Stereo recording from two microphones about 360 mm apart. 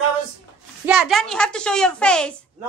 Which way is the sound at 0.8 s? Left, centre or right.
Centre.